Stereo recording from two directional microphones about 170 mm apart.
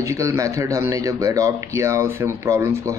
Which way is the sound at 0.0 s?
20° right (ahead or behind).